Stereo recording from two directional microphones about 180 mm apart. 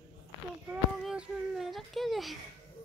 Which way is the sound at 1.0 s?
5° right (ahead or behind).